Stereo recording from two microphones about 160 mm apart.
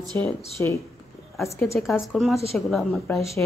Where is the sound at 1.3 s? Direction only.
Centre (ahead or behind).